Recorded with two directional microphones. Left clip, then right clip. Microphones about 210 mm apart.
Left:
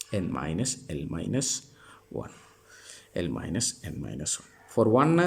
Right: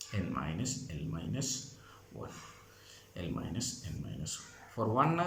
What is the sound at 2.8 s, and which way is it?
Speech, 45° left (ahead or behind).